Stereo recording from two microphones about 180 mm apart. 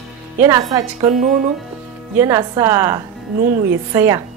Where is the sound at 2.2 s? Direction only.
15° right (ahead or behind).